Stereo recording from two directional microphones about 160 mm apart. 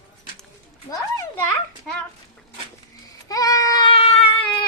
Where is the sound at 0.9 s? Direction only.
20° left (ahead or behind).